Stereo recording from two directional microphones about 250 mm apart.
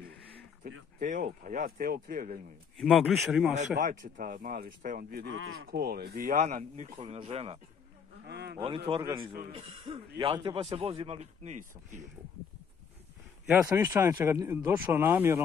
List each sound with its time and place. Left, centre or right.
0.7 s speech: right
2.8 s speech: centre
3.5 s speech: right
5.3 s speech: right
5.7 s a man's voice: right
8.3 s speech: right
8.5 s a man's voice: right
13.5 s speech: centre